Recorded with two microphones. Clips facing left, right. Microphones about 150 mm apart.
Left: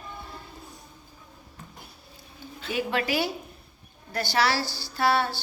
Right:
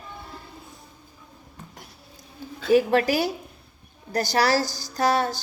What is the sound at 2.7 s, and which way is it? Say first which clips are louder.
A woman's voice: right 9 dB; 40° right (ahead or behind).